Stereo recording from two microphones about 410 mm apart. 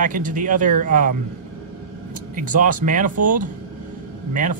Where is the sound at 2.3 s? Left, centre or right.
Centre.